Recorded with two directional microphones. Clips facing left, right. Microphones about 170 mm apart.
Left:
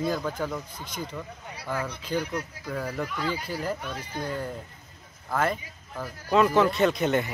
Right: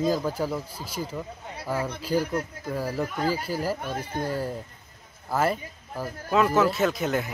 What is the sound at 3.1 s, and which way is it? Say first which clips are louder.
Speech: right 4 dB; 45° right (ahead or behind).